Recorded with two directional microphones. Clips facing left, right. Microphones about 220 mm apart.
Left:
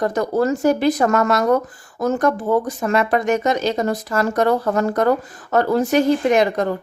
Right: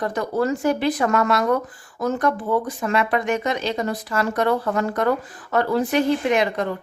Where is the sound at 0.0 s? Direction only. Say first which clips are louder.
Left 4 dB; 40° left (ahead or behind).